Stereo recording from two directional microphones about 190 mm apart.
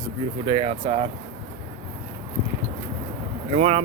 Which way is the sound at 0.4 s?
30° right (ahead or behind).